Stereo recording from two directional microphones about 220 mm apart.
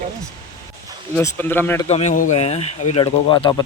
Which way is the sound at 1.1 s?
10° left (ahead or behind).